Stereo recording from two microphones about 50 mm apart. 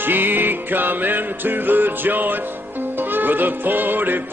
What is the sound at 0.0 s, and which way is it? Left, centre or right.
Music, right.